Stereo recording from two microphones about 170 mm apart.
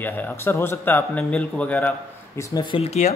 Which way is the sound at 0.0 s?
10° left (ahead or behind).